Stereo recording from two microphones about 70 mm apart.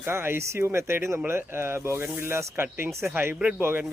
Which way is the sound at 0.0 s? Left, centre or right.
Right.